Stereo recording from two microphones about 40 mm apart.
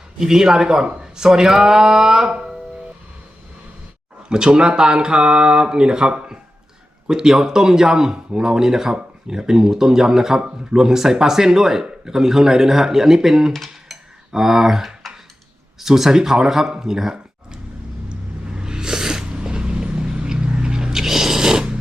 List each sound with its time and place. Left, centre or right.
0.2 s speech: centre
4.3 s speech: right
13.5 s cutlery: centre
13.9 s cutlery: centre
15.8 s speech: centre
16.7 s a sound: centre
19.4 s vehicle: right